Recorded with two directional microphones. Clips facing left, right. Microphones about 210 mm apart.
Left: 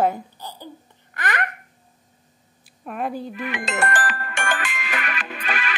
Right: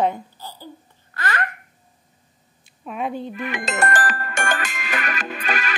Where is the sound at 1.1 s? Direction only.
15° left (ahead or behind).